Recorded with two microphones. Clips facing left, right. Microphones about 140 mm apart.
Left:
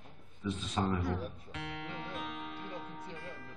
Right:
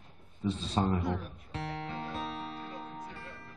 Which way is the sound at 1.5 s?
30° right (ahead or behind).